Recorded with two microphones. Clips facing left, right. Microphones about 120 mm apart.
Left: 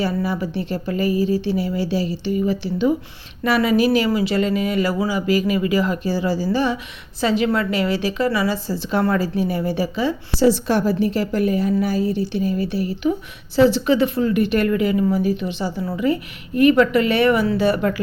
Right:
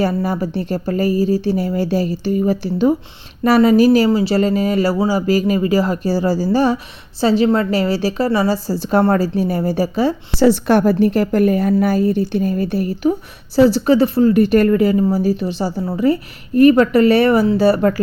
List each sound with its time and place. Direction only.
0.0 s speech: 45° right (ahead or behind)
10.3 s speech: 60° right (ahead or behind); by 18.0 s 40° right (ahead or behind)